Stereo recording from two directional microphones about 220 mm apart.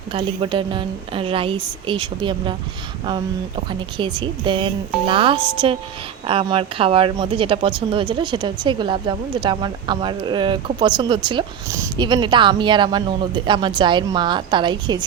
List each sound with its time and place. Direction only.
0.1 s speech: 20° right (ahead or behind)
3.7 s speech: 20° right (ahead or behind)